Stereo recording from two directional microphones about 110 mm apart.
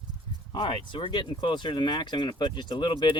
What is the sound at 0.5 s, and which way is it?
Speech, 50° left (ahead or behind).